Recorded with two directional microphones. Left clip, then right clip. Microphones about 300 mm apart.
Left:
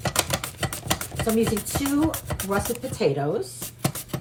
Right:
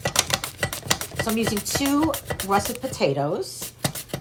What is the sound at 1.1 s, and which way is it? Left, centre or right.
Speech, centre.